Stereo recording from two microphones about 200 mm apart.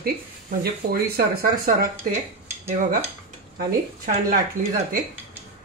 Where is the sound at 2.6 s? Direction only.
35° right (ahead or behind).